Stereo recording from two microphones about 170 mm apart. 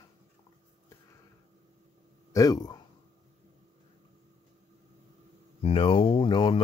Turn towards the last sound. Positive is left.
turn(degrees=30)  # may be behind; listen again after turning